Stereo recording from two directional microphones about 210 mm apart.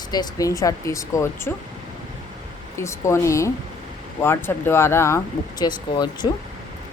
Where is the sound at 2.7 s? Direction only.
15° left (ahead or behind).